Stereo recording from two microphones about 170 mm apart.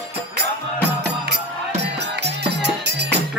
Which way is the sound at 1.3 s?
80° right.